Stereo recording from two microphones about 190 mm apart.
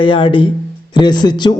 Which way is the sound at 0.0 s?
25° left (ahead or behind).